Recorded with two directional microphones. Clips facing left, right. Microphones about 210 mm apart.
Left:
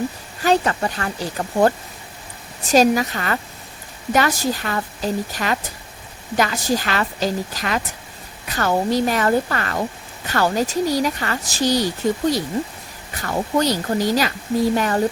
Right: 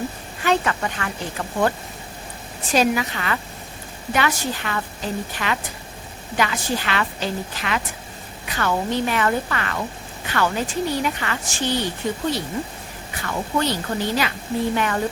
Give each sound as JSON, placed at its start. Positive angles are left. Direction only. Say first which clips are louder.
{"t": 0.4, "sound": "speech", "louder": "left 3 dB", "side_deg": 35}
{"t": 13.2, "sound": "speech", "louder": "left 4 dB", "side_deg": 40}